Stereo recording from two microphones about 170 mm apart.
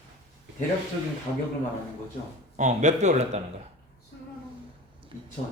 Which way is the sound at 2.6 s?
45° right (ahead or behind).